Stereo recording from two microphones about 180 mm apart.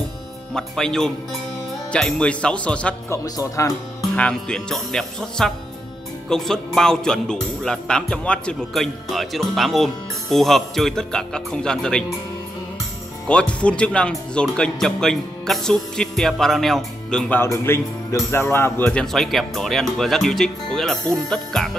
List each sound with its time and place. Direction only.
0.6 s speech: 5° left (ahead or behind)
3.3 s speech: 20° left (ahead or behind)
4.1 s speech: 5° left (ahead or behind)
13.3 s speech: 5° left (ahead or behind)